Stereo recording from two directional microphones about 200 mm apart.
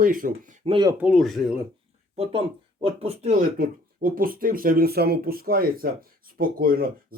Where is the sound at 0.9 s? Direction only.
5° right (ahead or behind).